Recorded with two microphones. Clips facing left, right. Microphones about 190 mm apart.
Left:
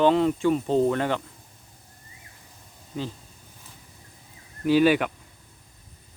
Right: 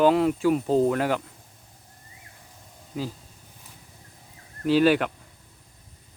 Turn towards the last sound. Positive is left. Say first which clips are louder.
# even
turn(degrees=0)  # may be behind; listen again after turning